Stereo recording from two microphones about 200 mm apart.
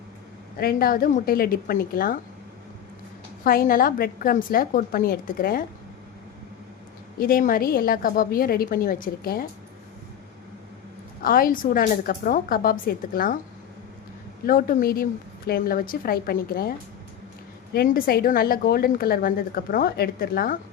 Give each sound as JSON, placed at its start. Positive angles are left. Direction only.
{"t": 0.6, "sound": "a woman's voice", "side_deg": 45}
{"t": 3.4, "sound": "a woman's voice", "side_deg": 45}
{"t": 7.2, "sound": "a woman's voice", "side_deg": 45}
{"t": 11.2, "sound": "a woman's voice", "side_deg": 45}
{"t": 14.4, "sound": "a woman's voice", "side_deg": 45}
{"t": 17.7, "sound": "a woman's voice", "side_deg": 45}